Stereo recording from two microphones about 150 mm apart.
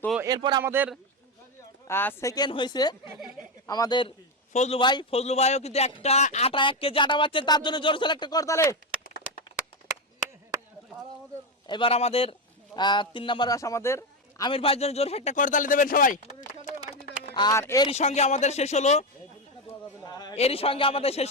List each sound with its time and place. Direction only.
0.3 s speech: 30° right (ahead or behind)
0.6 s a man's voice: 15° right (ahead or behind)
1.9 s speech: 15° left (ahead or behind)
4.5 s speech: 50° left (ahead or behind)
4.8 s a man's voice: 30° left (ahead or behind)
5.2 s a man's voice: 45° left (ahead or behind); by 8.8 s 20° left (ahead or behind)
11.6 s a man's voice: 35° left (ahead or behind)
14.5 s speech: 40° left (ahead or behind); by 16.3 s 60° left (ahead or behind)
17.3 s speech: 30° left (ahead or behind)
17.6 s speech: 20° left (ahead or behind)
17.8 s speech: 45° left (ahead or behind)
20.0 s a sound: 25° left (ahead or behind)
20.3 s a man's voice: 40° left (ahead or behind)